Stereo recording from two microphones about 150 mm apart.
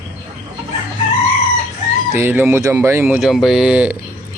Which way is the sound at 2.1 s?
15° right (ahead or behind).